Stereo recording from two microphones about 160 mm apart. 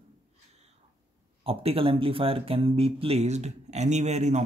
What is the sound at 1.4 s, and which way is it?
Speech, 35° right (ahead or behind).